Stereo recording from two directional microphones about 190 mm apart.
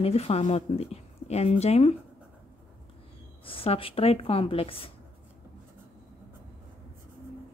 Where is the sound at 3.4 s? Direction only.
30° left (ahead or behind).